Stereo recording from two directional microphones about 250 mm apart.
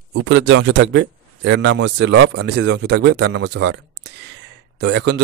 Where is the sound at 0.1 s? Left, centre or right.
Right.